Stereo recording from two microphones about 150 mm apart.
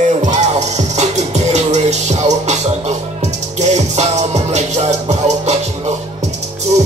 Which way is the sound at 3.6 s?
50° right (ahead or behind).